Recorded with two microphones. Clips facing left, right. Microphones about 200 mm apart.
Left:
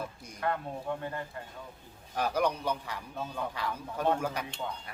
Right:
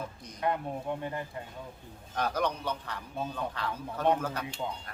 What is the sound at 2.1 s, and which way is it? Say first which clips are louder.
A man's voice: left 1 dB; 10° left (ahead or behind).